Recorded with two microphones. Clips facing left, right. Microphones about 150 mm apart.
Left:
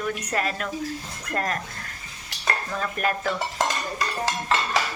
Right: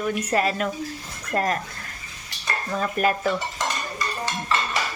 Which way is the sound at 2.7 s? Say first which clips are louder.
Right 6 dB; 10° right (ahead or behind).